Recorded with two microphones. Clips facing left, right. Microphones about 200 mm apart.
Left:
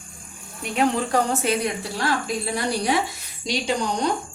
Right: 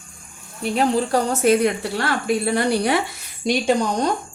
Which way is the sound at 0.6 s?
35° right (ahead or behind).